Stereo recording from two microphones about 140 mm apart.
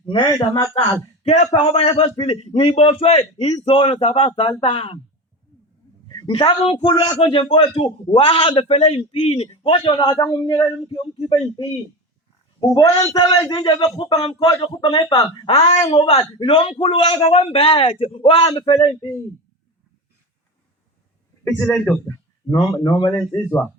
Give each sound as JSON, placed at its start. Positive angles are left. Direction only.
{"t": 0.0, "sound": "a man's voice", "side_deg": 35}
{"t": 1.2, "sound": "a man's voice", "side_deg": 50}
{"t": 6.1, "sound": "a man's voice", "side_deg": 35}
{"t": 8.6, "sound": "a man's voice", "side_deg": 50}
{"t": 13.1, "sound": "a man's voice", "side_deg": 30}
{"t": 15.4, "sound": "a man's voice", "side_deg": 40}
{"t": 15.8, "sound": "speech", "side_deg": 30}
{"t": 16.0, "sound": "a man's voice", "side_deg": 45}
{"t": 21.4, "sound": "a man's voice", "side_deg": 10}
{"t": 22.0, "sound": "a sound", "side_deg": 20}
{"t": 22.7, "sound": "a man's voice", "side_deg": 35}
{"t": 23.3, "sound": "a man's voice", "side_deg": 15}